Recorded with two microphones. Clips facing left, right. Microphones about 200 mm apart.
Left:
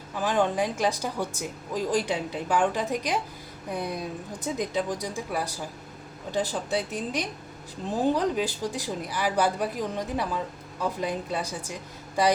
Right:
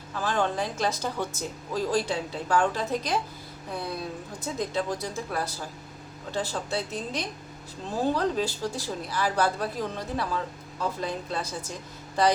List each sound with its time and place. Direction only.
0.2 s speech: 15° left (ahead or behind)